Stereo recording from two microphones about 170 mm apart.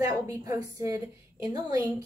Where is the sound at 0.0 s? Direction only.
20° right (ahead or behind).